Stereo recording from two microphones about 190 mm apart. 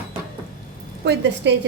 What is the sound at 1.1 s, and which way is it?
Speech, 65° right (ahead or behind).